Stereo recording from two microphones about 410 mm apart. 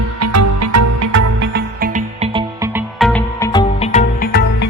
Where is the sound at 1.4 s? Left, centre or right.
Right; by 4.4 s centre.